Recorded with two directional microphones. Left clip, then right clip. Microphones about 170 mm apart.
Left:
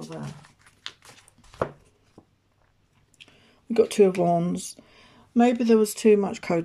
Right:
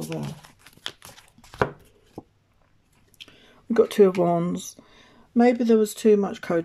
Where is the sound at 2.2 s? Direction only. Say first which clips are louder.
Right 12 dB; 65° right (ahead or behind).